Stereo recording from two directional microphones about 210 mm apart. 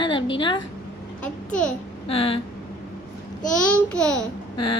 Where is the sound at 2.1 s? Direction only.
25° left (ahead or behind).